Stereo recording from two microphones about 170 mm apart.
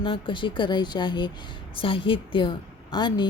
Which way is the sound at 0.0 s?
30° left (ahead or behind).